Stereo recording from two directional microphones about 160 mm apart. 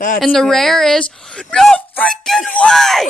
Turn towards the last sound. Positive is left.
turn(degrees=0)  # may be behind; listen again after turning